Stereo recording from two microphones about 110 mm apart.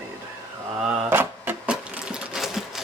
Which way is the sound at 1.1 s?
20° right (ahead or behind).